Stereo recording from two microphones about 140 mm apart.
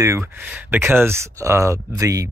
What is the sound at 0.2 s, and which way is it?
Speech, 10° right (ahead or behind).